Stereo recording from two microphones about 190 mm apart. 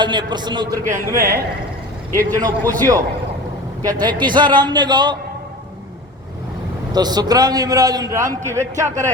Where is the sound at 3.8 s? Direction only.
25° right (ahead or behind).